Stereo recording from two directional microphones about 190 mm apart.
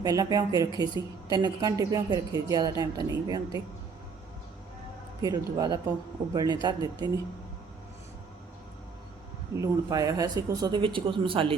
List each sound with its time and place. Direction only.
0.0 s speech: 20° right (ahead or behind)
5.2 s speech: 20° right (ahead or behind)
9.6 s speech: 15° right (ahead or behind)